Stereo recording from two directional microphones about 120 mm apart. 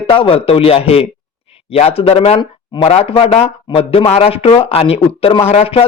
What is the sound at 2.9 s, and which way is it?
A man's voice, 55° left (ahead or behind).